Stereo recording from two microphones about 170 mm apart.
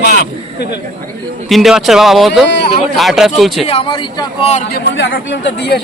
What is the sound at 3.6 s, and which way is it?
Speech, 30° left (ahead or behind).